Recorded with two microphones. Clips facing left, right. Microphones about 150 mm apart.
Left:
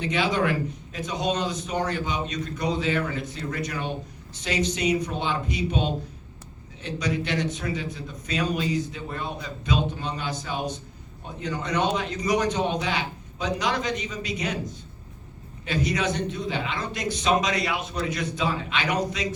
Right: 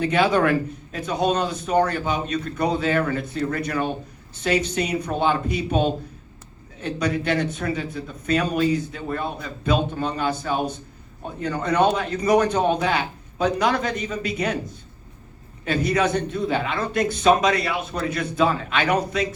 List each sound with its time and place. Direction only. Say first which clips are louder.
0.0 s a man's voice: right 5 dB; 55° right (ahead or behind)
15.6 s a man's voice: right 5 dB; 55° right (ahead or behind)